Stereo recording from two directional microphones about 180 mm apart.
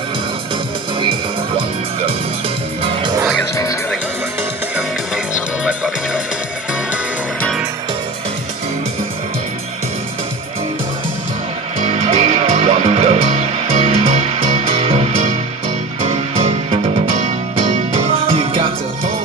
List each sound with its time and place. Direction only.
2.8 s music: 30° right (ahead or behind)
11.8 s music: 40° right (ahead or behind)